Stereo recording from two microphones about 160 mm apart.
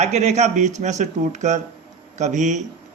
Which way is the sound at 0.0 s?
45° right (ahead or behind).